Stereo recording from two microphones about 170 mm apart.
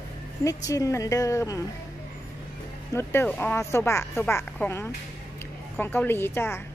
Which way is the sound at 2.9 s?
10° left (ahead or behind).